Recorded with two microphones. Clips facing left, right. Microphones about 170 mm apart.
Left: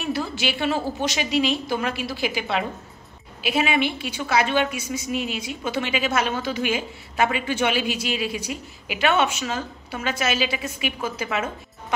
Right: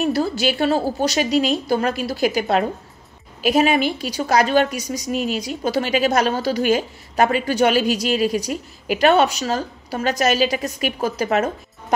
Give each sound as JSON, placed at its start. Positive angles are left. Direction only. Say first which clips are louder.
{"t": 0.0, "sound": "a woman's voice", "louder": "right 7 dB", "side_deg": -40}